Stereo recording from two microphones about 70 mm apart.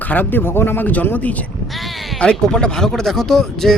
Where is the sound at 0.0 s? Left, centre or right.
Left.